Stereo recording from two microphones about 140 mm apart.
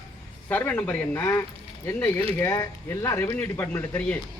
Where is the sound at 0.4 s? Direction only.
15° left (ahead or behind).